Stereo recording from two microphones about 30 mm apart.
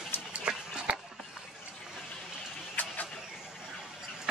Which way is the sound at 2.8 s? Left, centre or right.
Left.